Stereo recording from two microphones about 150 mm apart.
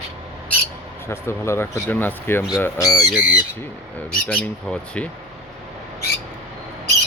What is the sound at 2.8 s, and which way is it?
Speech, 25° left (ahead or behind).